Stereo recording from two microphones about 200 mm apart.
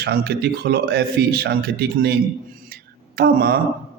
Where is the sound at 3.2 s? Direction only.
50° right (ahead or behind).